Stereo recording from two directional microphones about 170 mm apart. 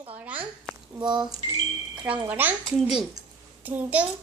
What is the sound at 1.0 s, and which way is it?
Speech, 25° right (ahead or behind).